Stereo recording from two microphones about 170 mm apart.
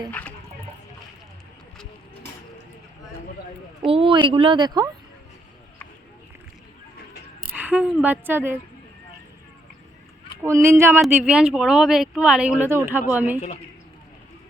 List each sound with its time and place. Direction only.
0.1 s a sound: 10° left (ahead or behind)
3.8 s speech: 35° right (ahead or behind)
7.5 s a woman's voice: 10° right (ahead or behind)
10.4 s speech: 15° right (ahead or behind)